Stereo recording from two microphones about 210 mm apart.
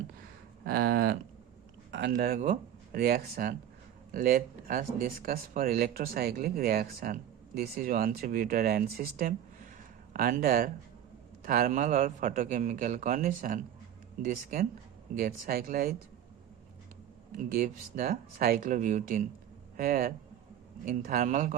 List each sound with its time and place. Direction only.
0.6 s speech: 45° right (ahead or behind)
1.9 s a sound: 55° right (ahead or behind)
2.1 s a man's voice: 40° right (ahead or behind)
17.3 s a man's voice: 40° right (ahead or behind)